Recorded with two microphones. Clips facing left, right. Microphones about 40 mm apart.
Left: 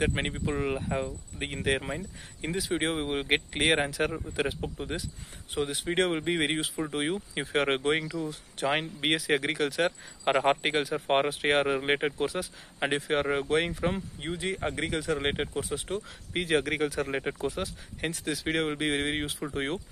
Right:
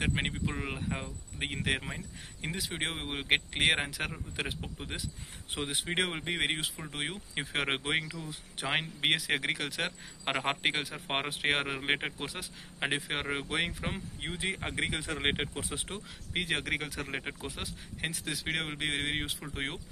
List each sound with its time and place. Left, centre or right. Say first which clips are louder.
0.0 s speech: left 3 dB; centre
1.8 s speech: left 6 dB; centre
2.4 s speech: left 6 dB; centre
5.5 s speech: left 5 dB; right
6.0 s speech: left 5 dB; centre
14.3 s speech: left 4 dB; right
16.3 s speech: left 5 dB; centre